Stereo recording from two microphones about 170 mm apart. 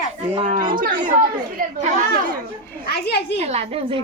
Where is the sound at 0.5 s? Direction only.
55° right (ahead or behind).